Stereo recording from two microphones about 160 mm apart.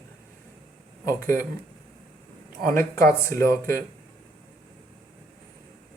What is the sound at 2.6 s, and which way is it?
Speech, 65° right (ahead or behind).